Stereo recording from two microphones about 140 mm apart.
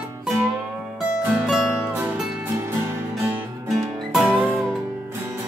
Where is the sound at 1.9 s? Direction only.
10° right (ahead or behind).